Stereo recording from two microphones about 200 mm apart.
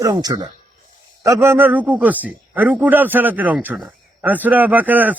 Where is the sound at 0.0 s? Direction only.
20° right (ahead or behind).